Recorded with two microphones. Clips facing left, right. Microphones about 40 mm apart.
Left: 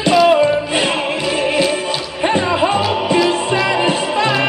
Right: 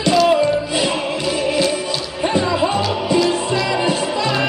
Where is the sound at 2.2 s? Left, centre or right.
Left.